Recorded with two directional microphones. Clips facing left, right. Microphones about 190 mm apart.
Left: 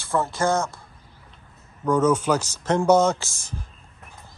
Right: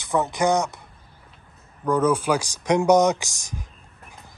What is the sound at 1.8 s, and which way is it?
Speech, 10° right (ahead or behind).